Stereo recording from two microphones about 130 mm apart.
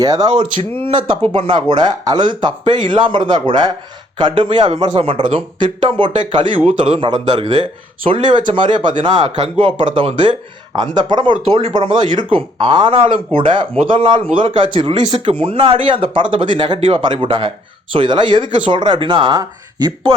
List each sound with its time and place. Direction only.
0.0 s speech: 30° right (ahead or behind)